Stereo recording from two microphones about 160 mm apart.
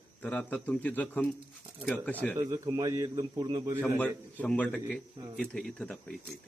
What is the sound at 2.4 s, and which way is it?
A man's voice, 20° right (ahead or behind).